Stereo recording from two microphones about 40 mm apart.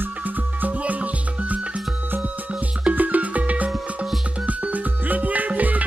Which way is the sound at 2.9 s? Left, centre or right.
Right.